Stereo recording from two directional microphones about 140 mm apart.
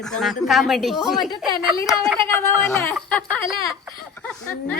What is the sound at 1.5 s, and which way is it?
Speech, 25° left (ahead or behind).